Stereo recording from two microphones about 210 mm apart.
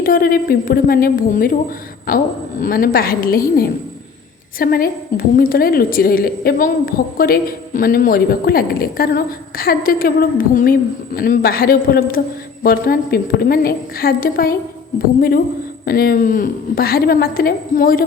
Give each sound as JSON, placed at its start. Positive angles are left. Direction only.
{"t": 0.0, "sound": "a woman's voice", "side_deg": 45}
{"t": 15.9, "sound": "a woman's voice", "side_deg": 45}